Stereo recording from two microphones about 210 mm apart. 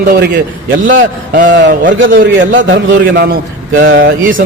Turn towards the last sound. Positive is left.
turn(degrees=-40)  # may be behind; listen again after turning